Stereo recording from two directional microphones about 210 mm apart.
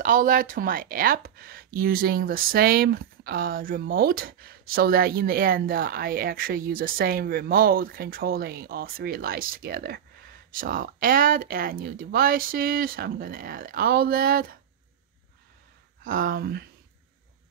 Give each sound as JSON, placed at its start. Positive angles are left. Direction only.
{"t": 0.0, "sound": "speech", "side_deg": -40}
{"t": 16.0, "sound": "speech", "side_deg": -45}